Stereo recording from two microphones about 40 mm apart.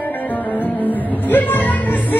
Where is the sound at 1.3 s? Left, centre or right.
Left.